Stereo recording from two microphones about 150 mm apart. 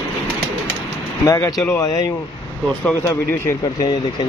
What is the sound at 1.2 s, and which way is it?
Speech, 20° left (ahead or behind).